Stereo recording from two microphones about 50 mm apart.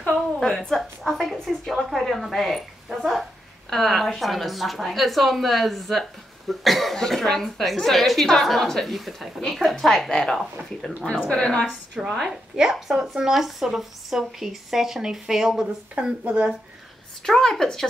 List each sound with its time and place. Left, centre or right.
0.1 s a sound: centre
3.7 s a woman's voice: centre
11.2 s a woman's voice: centre
11.6 s speech: centre
12.1 s a woman's voice: centre
15.9 s speech: right
17.2 s speech: centre